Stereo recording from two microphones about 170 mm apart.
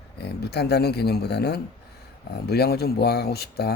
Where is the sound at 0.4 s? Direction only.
75° left (ahead or behind).